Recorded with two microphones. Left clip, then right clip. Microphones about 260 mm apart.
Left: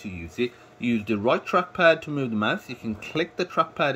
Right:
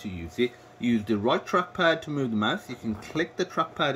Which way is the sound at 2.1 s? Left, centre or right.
Centre.